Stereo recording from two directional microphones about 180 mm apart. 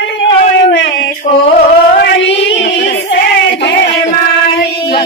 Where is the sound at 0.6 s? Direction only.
75° left (ahead or behind).